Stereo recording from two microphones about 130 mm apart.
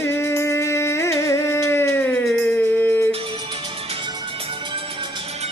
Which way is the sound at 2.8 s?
15° left (ahead or behind).